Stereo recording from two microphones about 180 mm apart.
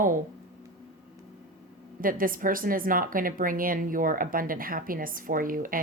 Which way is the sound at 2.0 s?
50° right (ahead or behind).